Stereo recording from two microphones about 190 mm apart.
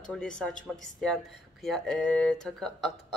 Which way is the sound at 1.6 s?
Centre (ahead or behind).